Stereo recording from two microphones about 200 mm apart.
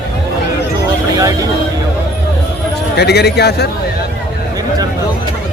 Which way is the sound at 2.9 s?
55° left (ahead or behind).